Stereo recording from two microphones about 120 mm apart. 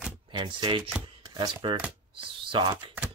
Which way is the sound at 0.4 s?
40° right (ahead or behind).